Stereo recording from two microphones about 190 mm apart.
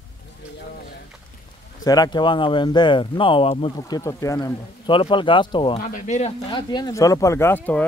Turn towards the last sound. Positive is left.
turn(degrees=10)  # may be behind; listen again after turning